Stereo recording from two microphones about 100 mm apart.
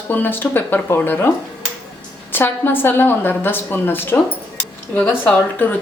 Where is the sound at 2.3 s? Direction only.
20° left (ahead or behind).